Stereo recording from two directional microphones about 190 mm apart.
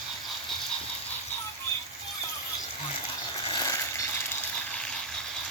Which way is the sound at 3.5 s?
20° left (ahead or behind).